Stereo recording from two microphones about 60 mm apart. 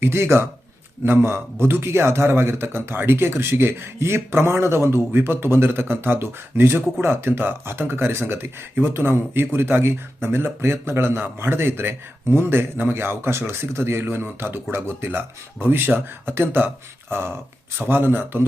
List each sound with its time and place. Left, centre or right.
0.0 s a man's voice: right